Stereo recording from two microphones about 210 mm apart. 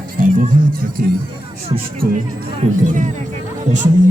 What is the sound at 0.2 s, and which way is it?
Music, 40° right (ahead or behind).